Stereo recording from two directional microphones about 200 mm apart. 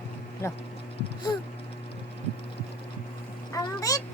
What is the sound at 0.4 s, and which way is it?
Speech, 15° left (ahead or behind).